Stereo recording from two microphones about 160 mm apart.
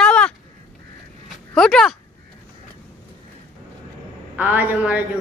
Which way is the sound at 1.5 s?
5° left (ahead or behind).